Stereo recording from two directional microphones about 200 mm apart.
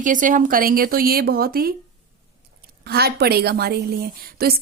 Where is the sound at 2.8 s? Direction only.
50° right (ahead or behind).